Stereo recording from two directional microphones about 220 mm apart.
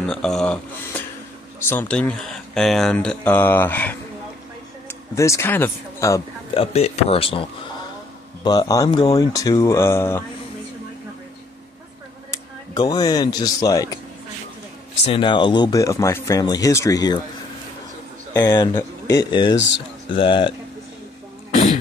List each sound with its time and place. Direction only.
0.0 s a sound: 5° left (ahead or behind)
1.6 s a man's voice: 10° left (ahead or behind)
6.5 s speech: 25° left (ahead or behind)
8.5 s speech: 15° left (ahead or behind)
12.3 s speech: 15° left (ahead or behind)
15.0 s speech: 20° left (ahead or behind)
18.3 s speech: 20° left (ahead or behind)